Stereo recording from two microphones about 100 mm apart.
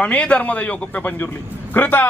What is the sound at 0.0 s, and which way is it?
A man's voice, 10° left (ahead or behind).